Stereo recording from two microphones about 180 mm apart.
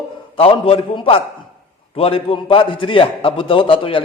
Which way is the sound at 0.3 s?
30° left (ahead or behind).